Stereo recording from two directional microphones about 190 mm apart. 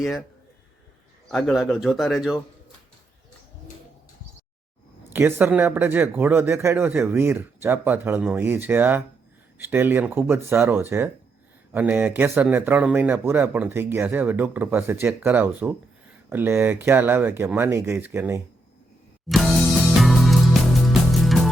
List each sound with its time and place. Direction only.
0.0 s speech: centre (ahead or behind)
1.3 s speech: centre (ahead or behind)
5.1 s a man's voice: 10° right (ahead or behind)
19.3 s music: centre (ahead or behind)